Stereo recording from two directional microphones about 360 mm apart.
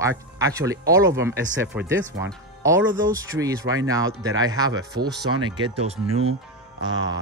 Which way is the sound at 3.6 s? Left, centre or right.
Right.